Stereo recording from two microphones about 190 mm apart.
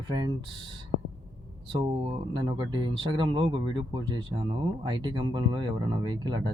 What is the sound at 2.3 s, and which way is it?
Speech, 25° right (ahead or behind).